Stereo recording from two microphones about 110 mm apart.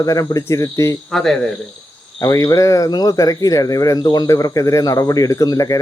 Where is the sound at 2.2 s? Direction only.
30° left (ahead or behind).